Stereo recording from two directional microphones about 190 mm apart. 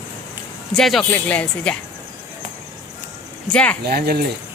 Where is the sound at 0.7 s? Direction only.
Centre (ahead or behind).